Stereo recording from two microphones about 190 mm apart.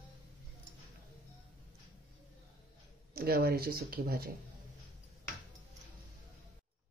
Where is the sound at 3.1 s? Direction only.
55° right (ahead or behind).